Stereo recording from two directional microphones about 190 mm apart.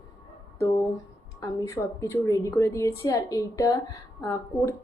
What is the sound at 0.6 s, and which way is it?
A woman's voice, 15° left (ahead or behind).